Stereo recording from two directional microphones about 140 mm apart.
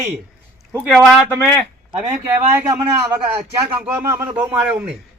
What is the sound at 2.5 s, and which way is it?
A man's voice, 15° right (ahead or behind).